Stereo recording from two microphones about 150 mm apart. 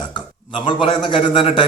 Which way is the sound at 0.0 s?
30° left (ahead or behind).